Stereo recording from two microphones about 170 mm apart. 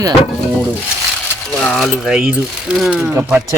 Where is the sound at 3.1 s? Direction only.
20° right (ahead or behind).